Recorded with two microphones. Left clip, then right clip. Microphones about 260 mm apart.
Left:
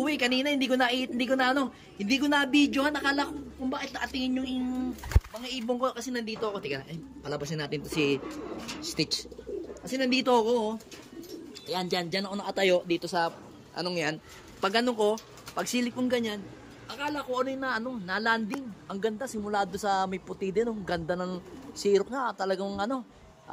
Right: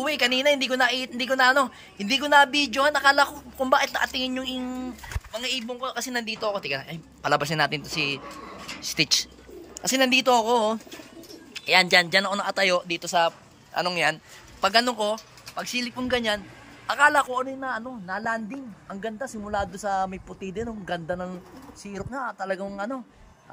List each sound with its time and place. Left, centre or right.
0.0 s a woman's voice: centre
5.7 s a woman's voice: centre
5.9 s a man's voice: centre
11.7 s a man's voice: right
12.4 s a woman's voice: centre